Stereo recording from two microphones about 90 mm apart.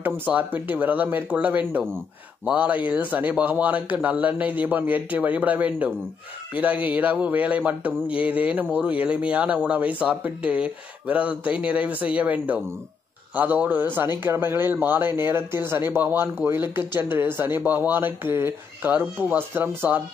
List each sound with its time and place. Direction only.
0.3 s speech: 20° right (ahead or behind)